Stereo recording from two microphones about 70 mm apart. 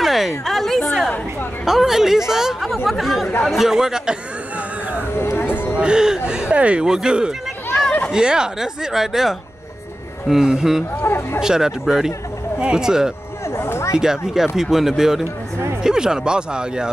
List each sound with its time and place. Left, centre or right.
0.0 s a sound: centre
1.7 s speech: centre
5.1 s a sound: left
5.8 s speech: centre
11.0 s speech: left
11.4 s speech: centre
13.6 s speech: left
13.9 s speech: centre